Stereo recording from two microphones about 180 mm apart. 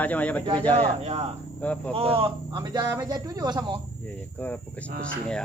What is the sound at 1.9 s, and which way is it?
Speech, 30° right (ahead or behind).